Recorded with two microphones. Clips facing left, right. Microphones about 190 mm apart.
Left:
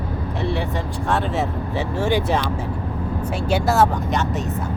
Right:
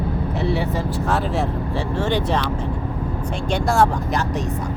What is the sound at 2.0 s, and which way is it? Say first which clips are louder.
Speech: left 1 dB; 10° left (ahead or behind).